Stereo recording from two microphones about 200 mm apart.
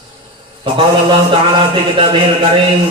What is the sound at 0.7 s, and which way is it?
A man's voice, 25° right (ahead or behind).